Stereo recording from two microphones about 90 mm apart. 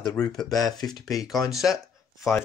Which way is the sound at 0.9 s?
40° left (ahead or behind).